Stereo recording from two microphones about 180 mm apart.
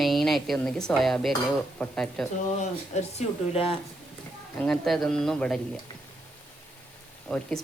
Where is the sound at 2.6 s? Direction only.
40° left (ahead or behind).